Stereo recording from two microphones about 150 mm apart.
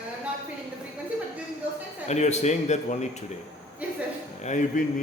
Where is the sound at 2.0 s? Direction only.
50° left (ahead or behind).